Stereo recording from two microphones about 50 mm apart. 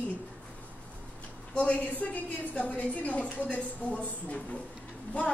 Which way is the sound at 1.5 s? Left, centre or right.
Left.